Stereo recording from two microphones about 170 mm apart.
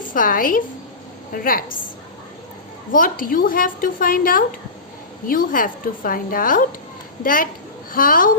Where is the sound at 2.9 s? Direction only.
55° left (ahead or behind).